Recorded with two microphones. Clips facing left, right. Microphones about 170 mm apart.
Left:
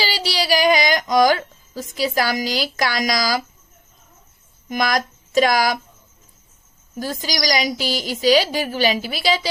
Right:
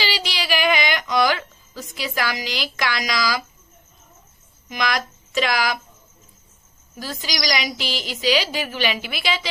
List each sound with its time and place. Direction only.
0.0 s child singing: 40° left (ahead or behind)
4.7 s speech: 45° left (ahead or behind)
6.9 s a woman's voice: 45° left (ahead or behind)